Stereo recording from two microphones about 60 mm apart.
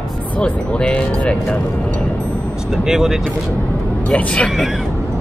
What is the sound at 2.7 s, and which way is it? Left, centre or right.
Speech, centre.